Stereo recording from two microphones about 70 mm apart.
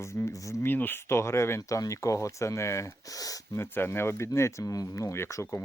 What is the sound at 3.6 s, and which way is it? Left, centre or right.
Speech, left.